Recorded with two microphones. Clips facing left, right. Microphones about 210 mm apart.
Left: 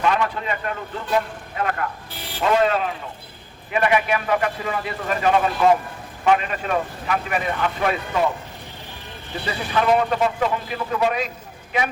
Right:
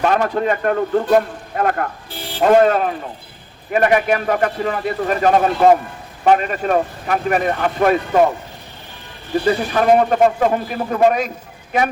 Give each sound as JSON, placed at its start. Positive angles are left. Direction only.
{"t": 0.0, "sound": "a man's voice", "side_deg": -45}
{"t": 9.5, "sound": "a man's voice", "side_deg": -50}